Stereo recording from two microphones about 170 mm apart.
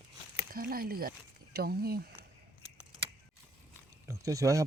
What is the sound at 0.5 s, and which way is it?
Speech, 60° right (ahead or behind).